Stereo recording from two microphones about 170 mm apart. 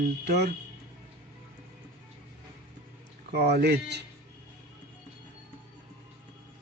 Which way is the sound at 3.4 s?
75° right (ahead or behind).